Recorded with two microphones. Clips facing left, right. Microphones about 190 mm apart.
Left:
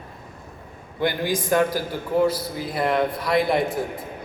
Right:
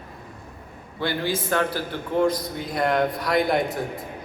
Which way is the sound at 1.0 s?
15° left (ahead or behind).